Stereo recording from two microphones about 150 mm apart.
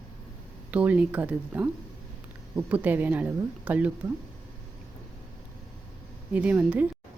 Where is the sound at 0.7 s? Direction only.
10° right (ahead or behind).